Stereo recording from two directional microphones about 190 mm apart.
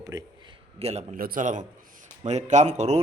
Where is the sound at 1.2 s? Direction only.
45° right (ahead or behind).